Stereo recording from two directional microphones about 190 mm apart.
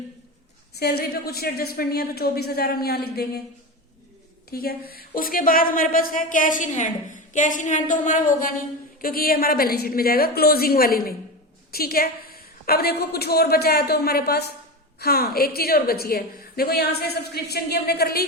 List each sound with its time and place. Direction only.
0.8 s a woman's voice: 55° left (ahead or behind)
4.5 s a woman's voice: 50° left (ahead or behind)